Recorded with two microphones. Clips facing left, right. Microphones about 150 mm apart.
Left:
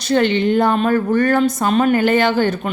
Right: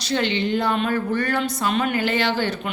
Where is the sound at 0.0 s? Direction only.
50° left (ahead or behind).